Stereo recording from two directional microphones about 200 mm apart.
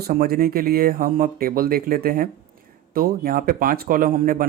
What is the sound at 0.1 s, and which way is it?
Speech, 45° right (ahead or behind).